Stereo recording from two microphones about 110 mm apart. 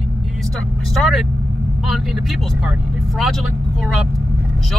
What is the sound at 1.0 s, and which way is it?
Vehicle, centre (ahead or behind).